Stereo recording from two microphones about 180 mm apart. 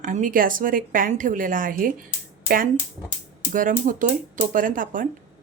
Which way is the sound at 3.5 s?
50° right (ahead or behind).